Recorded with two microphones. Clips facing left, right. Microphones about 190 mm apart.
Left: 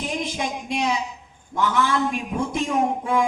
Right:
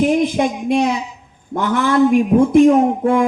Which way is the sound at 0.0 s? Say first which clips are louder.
Right 13 dB; 55° right (ahead or behind).